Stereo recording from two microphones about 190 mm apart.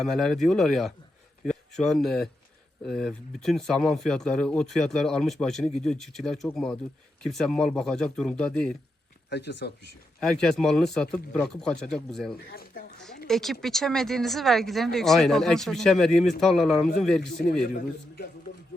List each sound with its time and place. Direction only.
0.0 s speech: centre (ahead or behind)
9.3 s speech: 65° left (ahead or behind)
10.2 s speech: centre (ahead or behind)
12.5 s speech: 50° left (ahead or behind)
13.2 s speech: centre (ahead or behind)